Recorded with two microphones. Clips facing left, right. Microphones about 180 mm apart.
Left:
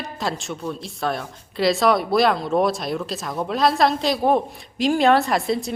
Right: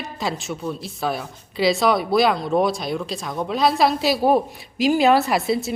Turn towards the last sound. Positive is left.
turn(degrees=-5)  # may be behind; listen again after turning